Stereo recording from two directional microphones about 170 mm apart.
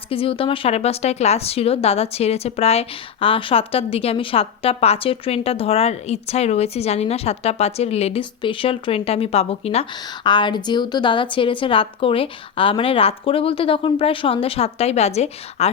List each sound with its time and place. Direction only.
0.1 s speech: 35° left (ahead or behind)
10.2 s speech: 25° left (ahead or behind)